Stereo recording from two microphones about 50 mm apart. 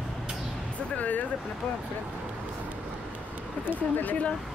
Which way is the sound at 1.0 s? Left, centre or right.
Left.